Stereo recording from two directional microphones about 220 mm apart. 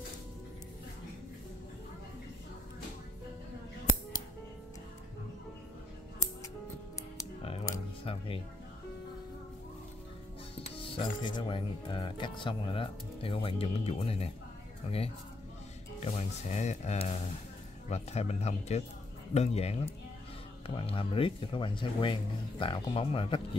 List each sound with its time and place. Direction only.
8.0 s speech: 25° left (ahead or behind)
10.8 s speech: 25° left (ahead or behind)
16.0 s speech: 30° left (ahead or behind)